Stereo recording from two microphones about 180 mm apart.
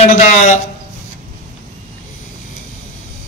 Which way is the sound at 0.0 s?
40° left (ahead or behind).